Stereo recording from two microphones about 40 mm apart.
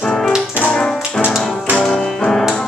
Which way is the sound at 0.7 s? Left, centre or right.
Left.